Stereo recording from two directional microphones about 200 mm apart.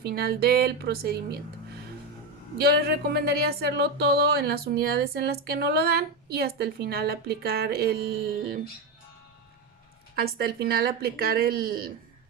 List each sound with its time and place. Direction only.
0.0 s speech: 50° right (ahead or behind)
2.6 s speech: 50° right (ahead or behind)
10.2 s speech: 50° right (ahead or behind)